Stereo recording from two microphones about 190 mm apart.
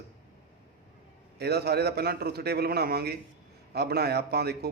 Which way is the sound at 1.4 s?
55° right (ahead or behind).